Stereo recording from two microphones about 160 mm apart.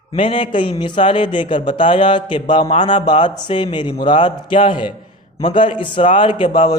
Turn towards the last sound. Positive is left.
turn(degrees=30)  # may be behind; listen again after turning